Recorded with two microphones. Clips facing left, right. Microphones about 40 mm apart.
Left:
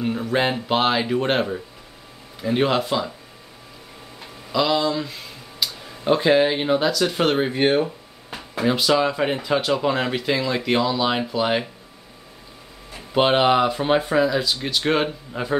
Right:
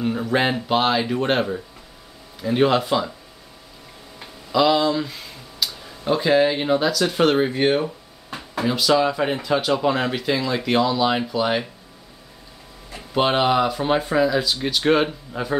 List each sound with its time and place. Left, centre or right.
0.0 s speech: centre
0.7 s speech: centre
4.5 s speech: centre
5.6 s tick-tock: centre
6.0 s speech: centre
13.1 s speech: centre